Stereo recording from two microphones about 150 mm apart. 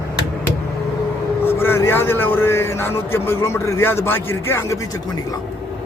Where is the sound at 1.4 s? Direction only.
15° left (ahead or behind).